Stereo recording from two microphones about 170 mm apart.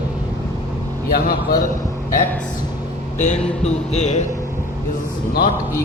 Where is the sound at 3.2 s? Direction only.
40° left (ahead or behind).